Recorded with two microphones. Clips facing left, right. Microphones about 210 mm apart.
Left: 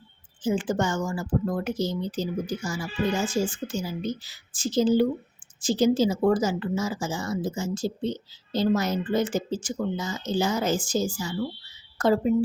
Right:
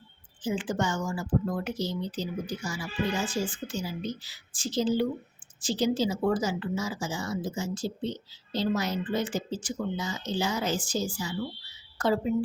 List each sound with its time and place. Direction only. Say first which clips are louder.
0.4 s a woman's voice: left 4 dB; 45° left (ahead or behind)